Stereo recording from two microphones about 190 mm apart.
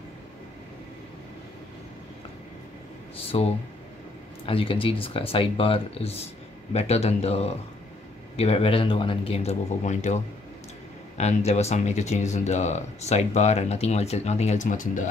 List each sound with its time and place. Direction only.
3.2 s speech: 30° left (ahead or behind)
4.5 s speech: 30° left (ahead or behind)